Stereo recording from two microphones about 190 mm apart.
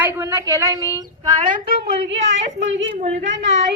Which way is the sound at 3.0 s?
35° right (ahead or behind).